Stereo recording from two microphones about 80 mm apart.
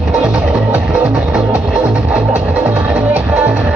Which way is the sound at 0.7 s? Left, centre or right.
Right.